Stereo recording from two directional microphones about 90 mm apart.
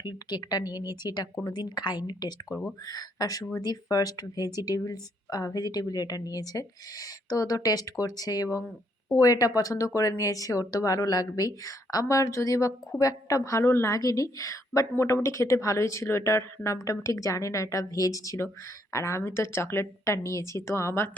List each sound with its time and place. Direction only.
0.0 s a woman's voice: 55° left (ahead or behind); by 21.1 s 30° left (ahead or behind)